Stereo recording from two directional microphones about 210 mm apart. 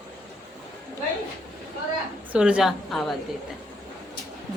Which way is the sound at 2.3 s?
5° right (ahead or behind).